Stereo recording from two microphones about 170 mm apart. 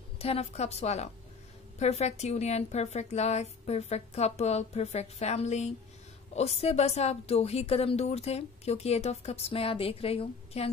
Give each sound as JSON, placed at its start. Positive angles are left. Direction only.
{"t": 0.2, "sound": "a woman's voice", "side_deg": 35}